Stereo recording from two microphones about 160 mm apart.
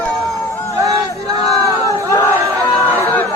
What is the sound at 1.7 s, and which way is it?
Crowd, 20° left (ahead or behind).